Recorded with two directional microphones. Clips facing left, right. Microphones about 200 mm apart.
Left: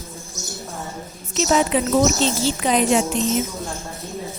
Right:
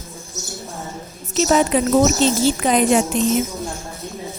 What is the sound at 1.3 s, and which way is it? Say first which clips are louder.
A woman's voice: right 2 dB; 45° right (ahead or behind).